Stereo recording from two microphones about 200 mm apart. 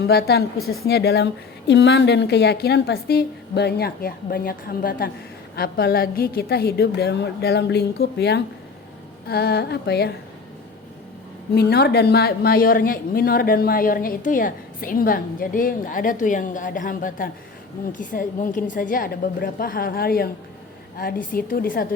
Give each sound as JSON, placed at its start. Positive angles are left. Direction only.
{"t": 0.1, "sound": "speech", "side_deg": 55}
{"t": 11.5, "sound": "speech", "side_deg": 55}